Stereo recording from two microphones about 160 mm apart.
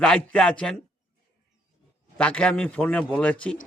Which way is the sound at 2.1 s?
5° left (ahead or behind).